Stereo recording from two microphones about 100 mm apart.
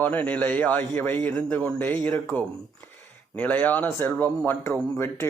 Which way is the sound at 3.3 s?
15° left (ahead or behind).